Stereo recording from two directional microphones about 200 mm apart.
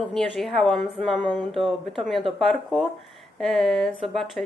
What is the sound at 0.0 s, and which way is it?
A woman's voice, centre (ahead or behind).